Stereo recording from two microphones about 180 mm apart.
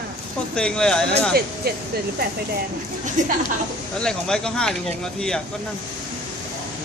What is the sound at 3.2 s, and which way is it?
Speech, 45° right (ahead or behind).